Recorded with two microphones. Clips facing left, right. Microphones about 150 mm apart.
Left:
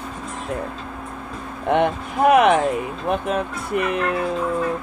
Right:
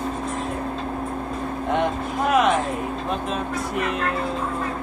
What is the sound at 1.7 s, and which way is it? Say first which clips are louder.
Speech: left 4 dB; 60° left (ahead or behind).